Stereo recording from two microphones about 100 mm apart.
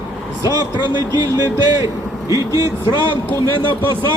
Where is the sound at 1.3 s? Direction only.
30° right (ahead or behind).